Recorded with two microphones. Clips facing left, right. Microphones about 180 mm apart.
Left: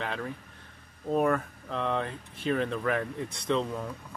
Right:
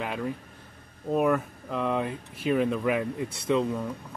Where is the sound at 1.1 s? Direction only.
5° right (ahead or behind).